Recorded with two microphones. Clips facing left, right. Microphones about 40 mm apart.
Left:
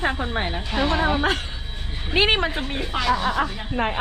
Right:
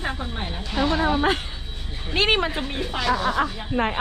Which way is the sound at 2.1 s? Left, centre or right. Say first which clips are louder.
Left 2 dB; centre.